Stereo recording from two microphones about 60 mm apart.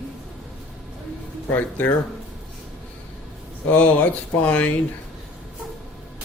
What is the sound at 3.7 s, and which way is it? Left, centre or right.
Speech, left.